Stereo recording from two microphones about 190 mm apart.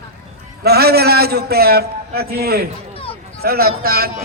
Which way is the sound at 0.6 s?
55° right (ahead or behind).